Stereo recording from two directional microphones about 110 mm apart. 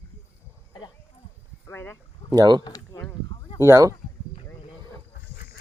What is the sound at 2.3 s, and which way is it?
Speech, 35° right (ahead or behind).